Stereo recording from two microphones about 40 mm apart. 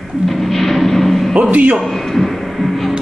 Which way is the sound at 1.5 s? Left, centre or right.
Right.